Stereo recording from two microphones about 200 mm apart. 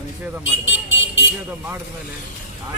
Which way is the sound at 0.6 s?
70° left (ahead or behind).